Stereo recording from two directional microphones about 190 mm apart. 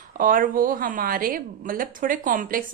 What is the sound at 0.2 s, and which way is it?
A woman's voice, 45° right (ahead or behind).